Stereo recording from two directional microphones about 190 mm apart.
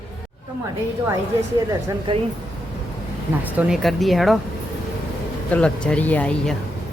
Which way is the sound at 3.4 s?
5° right (ahead or behind).